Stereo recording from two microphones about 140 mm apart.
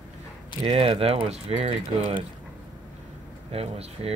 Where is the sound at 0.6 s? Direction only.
40° right (ahead or behind).